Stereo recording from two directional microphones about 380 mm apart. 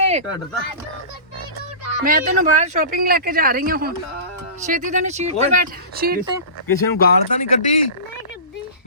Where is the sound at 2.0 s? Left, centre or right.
Right.